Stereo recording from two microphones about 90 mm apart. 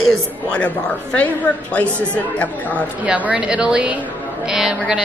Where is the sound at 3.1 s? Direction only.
15° right (ahead or behind).